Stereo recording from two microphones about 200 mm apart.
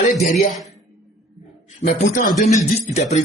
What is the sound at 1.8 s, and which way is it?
A woman's voice, 40° left (ahead or behind).